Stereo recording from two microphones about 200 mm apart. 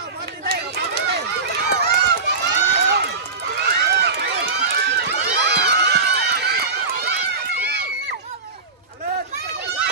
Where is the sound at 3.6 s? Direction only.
55° right (ahead or behind).